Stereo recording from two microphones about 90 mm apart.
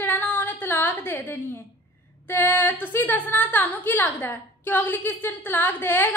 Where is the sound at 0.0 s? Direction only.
20° left (ahead or behind).